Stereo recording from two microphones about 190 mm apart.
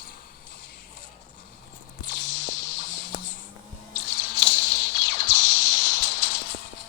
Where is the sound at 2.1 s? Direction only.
70° left (ahead or behind).